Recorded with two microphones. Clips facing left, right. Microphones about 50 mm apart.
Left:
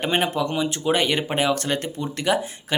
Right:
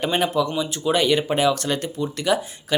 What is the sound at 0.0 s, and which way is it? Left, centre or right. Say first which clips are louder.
Speech: right 1 dB; left.